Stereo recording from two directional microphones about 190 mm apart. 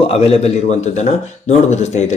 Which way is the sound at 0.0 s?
30° left (ahead or behind).